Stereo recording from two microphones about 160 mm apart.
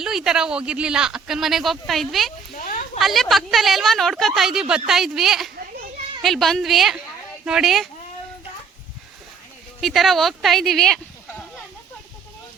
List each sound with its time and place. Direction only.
0.0 s speech: 5° right (ahead or behind)
2.6 s a sound: 60° left (ahead or behind)
3.0 s speech: centre (ahead or behind)
9.8 s speech: centre (ahead or behind)